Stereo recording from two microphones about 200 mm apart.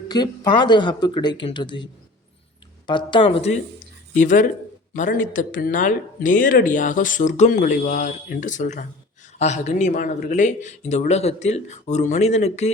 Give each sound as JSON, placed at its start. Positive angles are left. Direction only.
{"t": 0.1, "sound": "speech", "side_deg": 20}
{"t": 4.1, "sound": "speech", "side_deg": 40}